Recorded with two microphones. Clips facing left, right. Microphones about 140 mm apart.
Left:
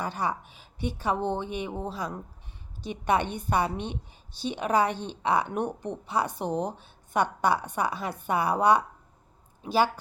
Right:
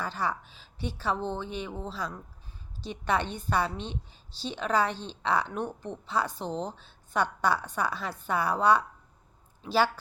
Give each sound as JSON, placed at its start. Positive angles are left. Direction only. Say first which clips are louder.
{"t": 0.2, "sound": "a woman's voice", "louder": "left 2 dB", "side_deg": 15}